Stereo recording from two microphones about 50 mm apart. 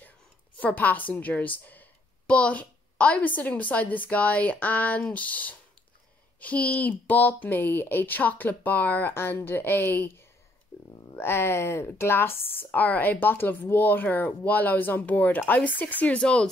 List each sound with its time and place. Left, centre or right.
0.6 s speech: left
2.2 s speech: left
9.1 s a woman's voice: left